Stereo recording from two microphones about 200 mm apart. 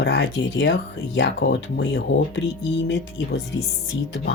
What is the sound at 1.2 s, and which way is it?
Speech, 60° left (ahead or behind).